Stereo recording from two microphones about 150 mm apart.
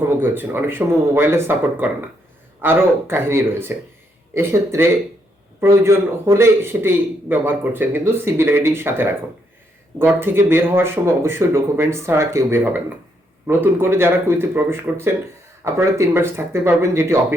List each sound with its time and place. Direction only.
0.1 s a man's voice: 15° right (ahead or behind)